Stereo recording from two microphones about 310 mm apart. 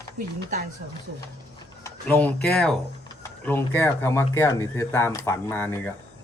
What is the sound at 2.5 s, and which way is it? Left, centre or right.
Speech, centre.